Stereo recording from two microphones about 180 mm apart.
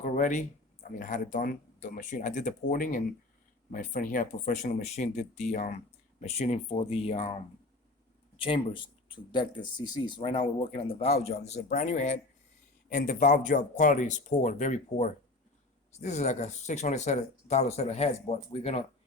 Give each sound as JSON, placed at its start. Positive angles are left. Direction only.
{"t": 0.0, "sound": "speech", "side_deg": 45}
{"t": 8.4, "sound": "speech", "side_deg": 25}